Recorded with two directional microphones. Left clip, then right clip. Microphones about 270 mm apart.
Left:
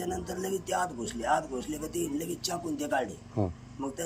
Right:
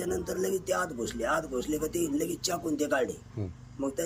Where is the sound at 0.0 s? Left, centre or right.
Centre.